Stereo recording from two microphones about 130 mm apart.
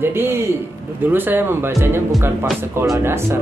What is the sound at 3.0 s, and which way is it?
Speech, 20° right (ahead or behind).